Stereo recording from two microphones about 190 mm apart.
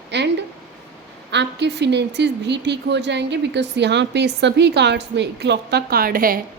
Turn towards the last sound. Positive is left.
turn(degrees=-50)  # may be behind; listen again after turning